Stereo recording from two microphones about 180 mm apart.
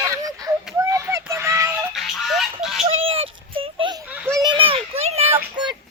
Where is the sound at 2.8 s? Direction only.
30° right (ahead or behind).